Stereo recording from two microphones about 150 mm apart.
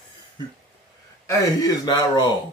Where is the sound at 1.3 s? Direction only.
25° left (ahead or behind).